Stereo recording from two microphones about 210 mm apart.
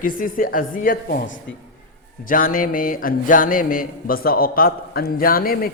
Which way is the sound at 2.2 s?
40° left (ahead or behind).